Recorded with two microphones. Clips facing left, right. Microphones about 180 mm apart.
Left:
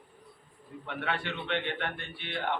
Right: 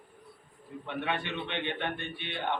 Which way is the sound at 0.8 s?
20° right (ahead or behind).